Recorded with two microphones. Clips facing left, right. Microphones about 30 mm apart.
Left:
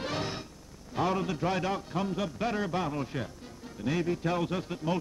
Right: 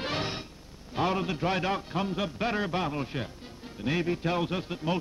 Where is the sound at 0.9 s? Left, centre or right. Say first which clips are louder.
Right 1 dB; right.